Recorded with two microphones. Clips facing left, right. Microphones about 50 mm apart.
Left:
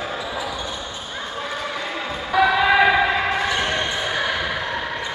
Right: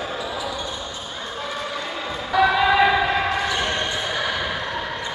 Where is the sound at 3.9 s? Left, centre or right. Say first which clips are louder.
Left 2 dB; centre.